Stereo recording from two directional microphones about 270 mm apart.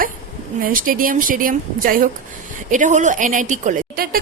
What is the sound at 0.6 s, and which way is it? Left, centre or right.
A woman's voice, right.